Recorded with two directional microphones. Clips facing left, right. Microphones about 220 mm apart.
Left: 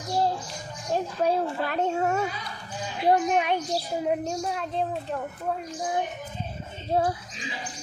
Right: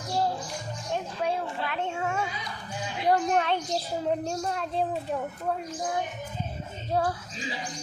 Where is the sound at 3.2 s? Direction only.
10° left (ahead or behind).